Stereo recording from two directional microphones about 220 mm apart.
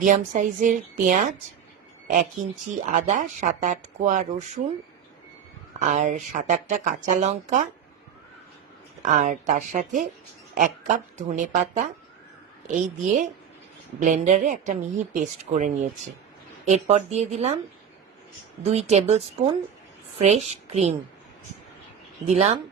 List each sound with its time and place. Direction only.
0.0 s a woman's voice: 35° right (ahead or behind)
2.8 s a woman's voice: 35° right (ahead or behind)
5.8 s a woman's voice: 35° right (ahead or behind)
9.0 s a woman's voice: 35° right (ahead or behind)
18.6 s a woman's voice: 30° right (ahead or behind)
22.3 s speech: 30° right (ahead or behind)